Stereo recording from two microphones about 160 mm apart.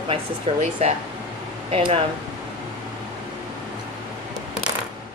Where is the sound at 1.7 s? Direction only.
40° right (ahead or behind).